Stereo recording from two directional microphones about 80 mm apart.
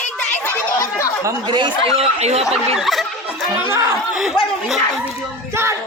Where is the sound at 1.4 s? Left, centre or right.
Right.